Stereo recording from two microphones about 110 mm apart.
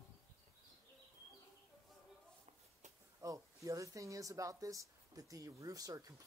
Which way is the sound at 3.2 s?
30° right (ahead or behind).